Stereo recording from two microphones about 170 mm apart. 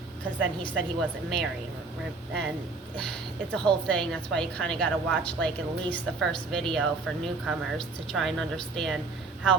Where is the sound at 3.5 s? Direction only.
5° left (ahead or behind).